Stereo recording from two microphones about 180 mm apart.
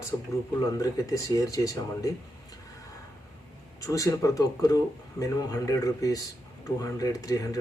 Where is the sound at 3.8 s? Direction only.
20° left (ahead or behind).